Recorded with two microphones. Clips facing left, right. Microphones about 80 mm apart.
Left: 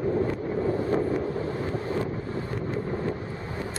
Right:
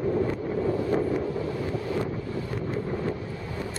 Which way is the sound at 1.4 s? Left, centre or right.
Left.